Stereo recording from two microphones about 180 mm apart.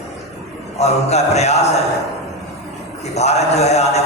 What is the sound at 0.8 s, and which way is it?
Speech, 35° left (ahead or behind).